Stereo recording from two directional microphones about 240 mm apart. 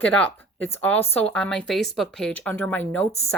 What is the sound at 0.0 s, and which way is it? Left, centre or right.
Speech, centre.